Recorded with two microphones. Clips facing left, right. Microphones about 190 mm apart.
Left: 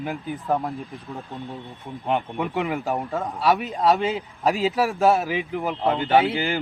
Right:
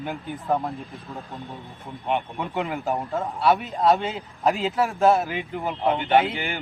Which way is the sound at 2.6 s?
Centre (ahead or behind).